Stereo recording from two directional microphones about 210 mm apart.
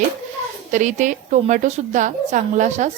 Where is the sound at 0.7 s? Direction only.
35° right (ahead or behind).